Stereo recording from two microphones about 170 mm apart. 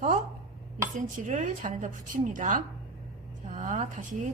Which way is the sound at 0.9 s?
45° right (ahead or behind).